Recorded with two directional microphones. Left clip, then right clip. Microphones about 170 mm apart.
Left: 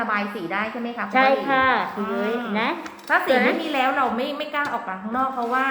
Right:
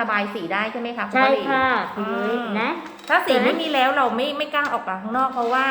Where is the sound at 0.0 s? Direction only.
25° right (ahead or behind).